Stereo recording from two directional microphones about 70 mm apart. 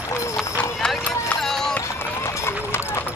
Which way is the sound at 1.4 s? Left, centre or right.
Centre.